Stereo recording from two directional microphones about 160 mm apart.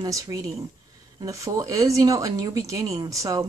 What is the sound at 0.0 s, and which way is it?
Speech, 20° right (ahead or behind).